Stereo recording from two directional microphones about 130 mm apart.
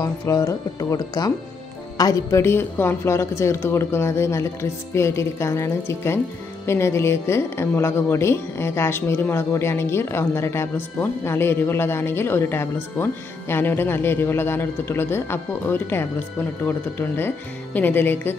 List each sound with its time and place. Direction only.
0.0 s a woman's voice: 25° left (ahead or behind)